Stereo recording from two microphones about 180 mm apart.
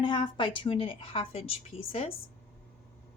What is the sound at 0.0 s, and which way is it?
A woman's voice, 25° left (ahead or behind).